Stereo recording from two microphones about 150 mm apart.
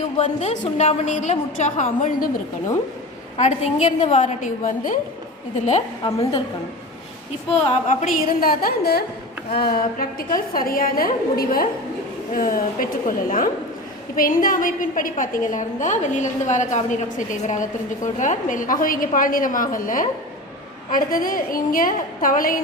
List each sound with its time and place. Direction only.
0.2 s a woman's voice: 50° left (ahead or behind)
3.4 s a woman's voice: 45° left (ahead or behind)
6.0 s a woman's voice: 20° left (ahead or behind)
7.5 s a woman's voice: 50° left (ahead or behind); by 22.6 s 70° left (ahead or behind)